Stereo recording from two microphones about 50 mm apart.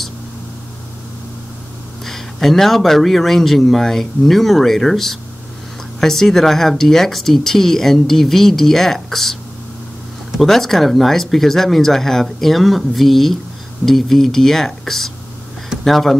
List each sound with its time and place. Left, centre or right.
2.0 s speech: centre
10.4 s speech: centre